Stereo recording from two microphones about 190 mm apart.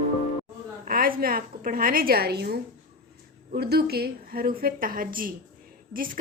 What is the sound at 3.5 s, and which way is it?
A woman's voice, 55° right (ahead or behind).